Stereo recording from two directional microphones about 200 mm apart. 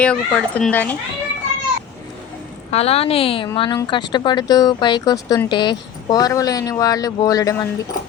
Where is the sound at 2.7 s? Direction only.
30° left (ahead or behind).